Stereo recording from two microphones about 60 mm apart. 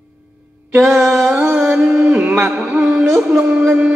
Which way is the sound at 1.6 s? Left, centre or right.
Centre.